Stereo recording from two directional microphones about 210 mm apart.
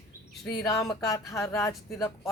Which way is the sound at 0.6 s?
15° left (ahead or behind).